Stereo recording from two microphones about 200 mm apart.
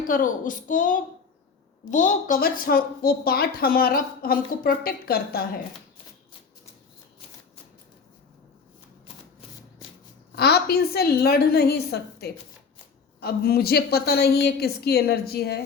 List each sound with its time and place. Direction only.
0.0 s a child's voice: 45° left (ahead or behind)
10.3 s a woman's voice: 55° left (ahead or behind)